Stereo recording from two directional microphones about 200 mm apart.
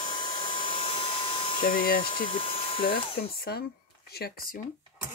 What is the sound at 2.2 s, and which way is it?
Speech, 25° left (ahead or behind).